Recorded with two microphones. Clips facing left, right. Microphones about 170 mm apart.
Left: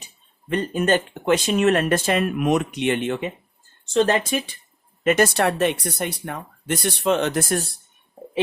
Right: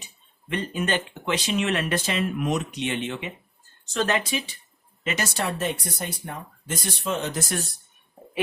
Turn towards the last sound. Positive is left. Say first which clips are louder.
# left 6 dB
turn(degrees=35)  # may be behind; listen again after turning